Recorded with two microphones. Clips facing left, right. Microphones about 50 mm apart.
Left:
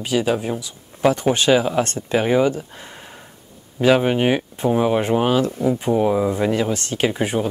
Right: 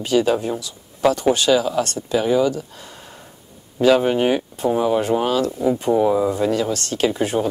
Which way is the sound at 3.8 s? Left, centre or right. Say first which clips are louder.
Right 1 dB; centre.